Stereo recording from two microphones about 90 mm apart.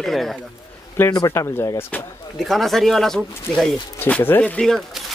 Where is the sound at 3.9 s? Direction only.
20° left (ahead or behind).